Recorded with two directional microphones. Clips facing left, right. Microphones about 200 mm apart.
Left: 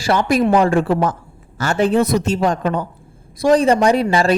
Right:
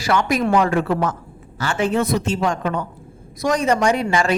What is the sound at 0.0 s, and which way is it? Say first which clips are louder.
Speech: left 3 dB; 30° left (ahead or behind).